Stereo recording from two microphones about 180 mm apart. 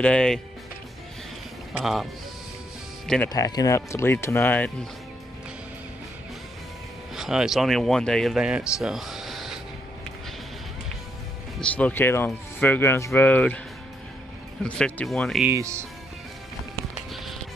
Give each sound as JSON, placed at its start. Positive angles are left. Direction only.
{"t": 0.0, "sound": "speech", "side_deg": 5}
{"t": 1.7, "sound": "speech", "side_deg": 0}
{"t": 3.3, "sound": "speech", "side_deg": 20}
{"t": 7.2, "sound": "speech", "side_deg": 0}
{"t": 11.6, "sound": "speech", "side_deg": 10}
{"t": 14.6, "sound": "speech", "side_deg": 5}
{"t": 15.4, "sound": "speech", "side_deg": -15}